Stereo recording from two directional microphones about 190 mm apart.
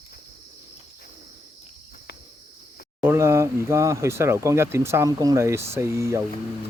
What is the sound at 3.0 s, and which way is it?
Speech, 15° right (ahead or behind).